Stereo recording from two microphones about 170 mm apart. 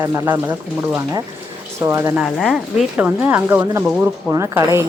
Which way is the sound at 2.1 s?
Centre (ahead or behind).